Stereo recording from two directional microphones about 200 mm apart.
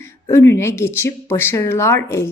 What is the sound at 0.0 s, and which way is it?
Speech, 10° left (ahead or behind).